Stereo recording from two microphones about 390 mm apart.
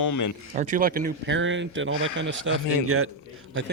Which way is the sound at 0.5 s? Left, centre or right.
Centre.